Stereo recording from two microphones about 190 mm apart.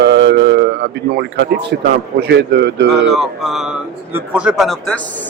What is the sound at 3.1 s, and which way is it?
Speech, centre (ahead or behind).